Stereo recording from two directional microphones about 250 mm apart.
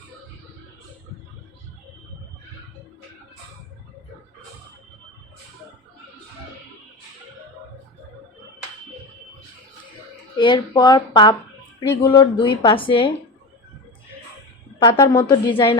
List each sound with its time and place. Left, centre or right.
10.3 s speech: centre
14.8 s a woman's voice: centre